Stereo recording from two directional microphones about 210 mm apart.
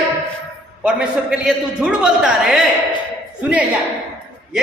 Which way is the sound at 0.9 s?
5° right (ahead or behind).